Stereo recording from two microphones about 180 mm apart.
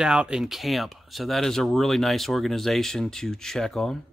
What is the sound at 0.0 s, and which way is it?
Speech, 5° right (ahead or behind).